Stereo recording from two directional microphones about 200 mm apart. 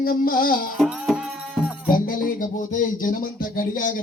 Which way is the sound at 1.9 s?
45° left (ahead or behind).